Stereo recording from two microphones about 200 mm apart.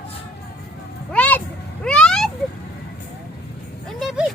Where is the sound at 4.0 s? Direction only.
Centre (ahead or behind).